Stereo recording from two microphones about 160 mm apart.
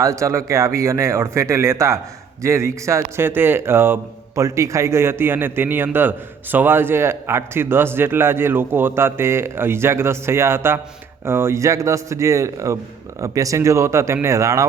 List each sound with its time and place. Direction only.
0.0 s speech: 20° right (ahead or behind)